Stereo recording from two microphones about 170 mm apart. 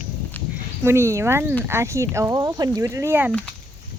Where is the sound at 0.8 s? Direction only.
15° right (ahead or behind).